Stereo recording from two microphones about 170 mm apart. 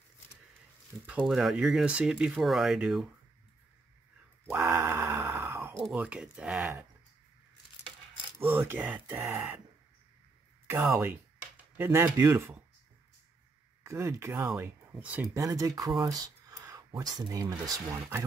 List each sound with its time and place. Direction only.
1.0 s speech: 5° right (ahead or behind)
4.6 s grunt: 15° right (ahead or behind)
5.8 s speech: 5° right (ahead or behind)
8.5 s speech: 10° right (ahead or behind)
10.7 s speech: 10° right (ahead or behind)
13.8 s speech: 15° right (ahead or behind)